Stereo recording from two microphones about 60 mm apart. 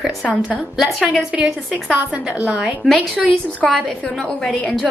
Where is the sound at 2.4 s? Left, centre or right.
Right.